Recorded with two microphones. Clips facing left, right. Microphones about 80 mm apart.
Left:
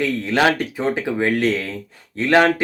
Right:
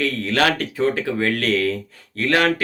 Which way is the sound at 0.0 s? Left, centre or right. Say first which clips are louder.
Left 2 dB; centre.